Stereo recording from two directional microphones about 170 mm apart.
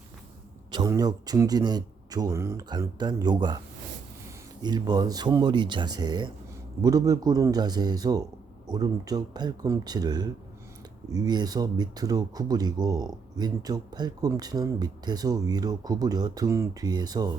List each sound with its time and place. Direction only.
0.7 s speech: 20° right (ahead or behind)
4.6 s speech: 25° right (ahead or behind)